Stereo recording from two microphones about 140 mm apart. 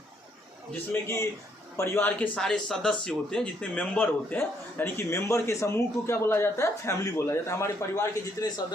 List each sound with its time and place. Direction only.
1.0 s a man's voice: 20° left (ahead or behind)